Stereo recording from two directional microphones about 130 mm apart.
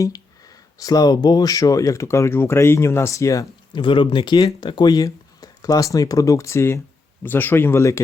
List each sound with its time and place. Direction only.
0.0 s speech: 25° left (ahead or behind)
3.8 s speech: 40° left (ahead or behind); by 8.0 s 20° left (ahead or behind)